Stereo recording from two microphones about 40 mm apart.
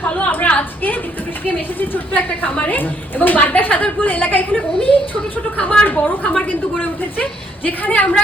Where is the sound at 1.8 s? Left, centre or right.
Left.